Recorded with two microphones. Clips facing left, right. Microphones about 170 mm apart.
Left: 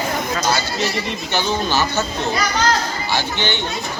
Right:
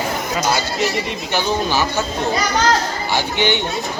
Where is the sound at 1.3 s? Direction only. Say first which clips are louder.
Right 1 dB; 10° right (ahead or behind).